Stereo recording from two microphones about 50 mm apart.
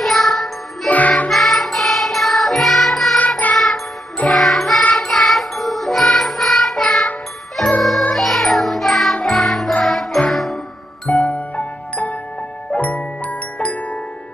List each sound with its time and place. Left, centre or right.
0.0 s music: centre
0.8 s music: left
1.3 s music: centre
11.2 s music: left
12.7 s glockenspiel: left